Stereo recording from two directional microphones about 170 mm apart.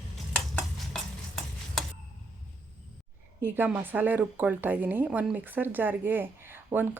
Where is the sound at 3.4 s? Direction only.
10° right (ahead or behind).